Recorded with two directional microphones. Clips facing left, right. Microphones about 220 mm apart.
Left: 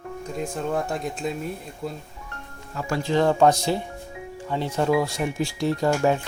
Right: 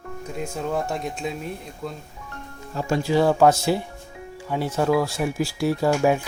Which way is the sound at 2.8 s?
25° right (ahead or behind).